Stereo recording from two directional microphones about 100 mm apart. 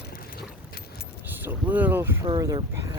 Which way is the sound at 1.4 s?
15° right (ahead or behind).